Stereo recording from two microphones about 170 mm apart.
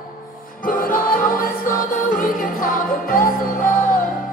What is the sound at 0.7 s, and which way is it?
Music, 55° left (ahead or behind).